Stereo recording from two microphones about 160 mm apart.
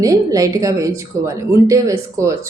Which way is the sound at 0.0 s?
20° right (ahead or behind).